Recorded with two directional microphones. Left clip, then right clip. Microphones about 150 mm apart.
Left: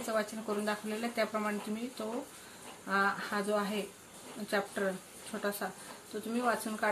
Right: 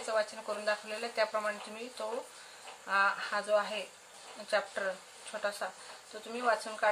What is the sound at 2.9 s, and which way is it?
Speech, 30° right (ahead or behind).